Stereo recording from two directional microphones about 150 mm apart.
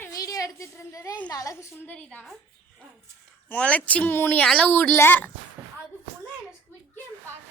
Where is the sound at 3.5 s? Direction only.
10° left (ahead or behind).